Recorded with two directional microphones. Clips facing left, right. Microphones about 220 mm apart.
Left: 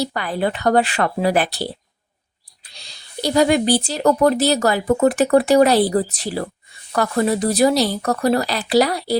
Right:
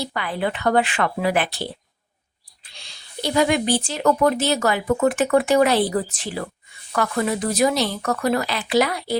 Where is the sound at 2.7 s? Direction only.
35° left (ahead or behind).